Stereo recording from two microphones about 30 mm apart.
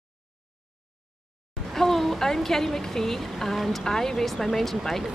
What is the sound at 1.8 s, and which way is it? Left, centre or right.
Speech, centre.